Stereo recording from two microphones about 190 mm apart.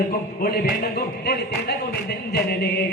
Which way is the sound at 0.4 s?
55° left (ahead or behind).